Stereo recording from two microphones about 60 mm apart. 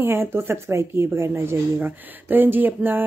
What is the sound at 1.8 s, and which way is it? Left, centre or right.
Speech, right.